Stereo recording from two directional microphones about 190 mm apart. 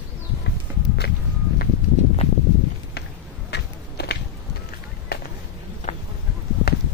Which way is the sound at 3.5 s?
60° left (ahead or behind).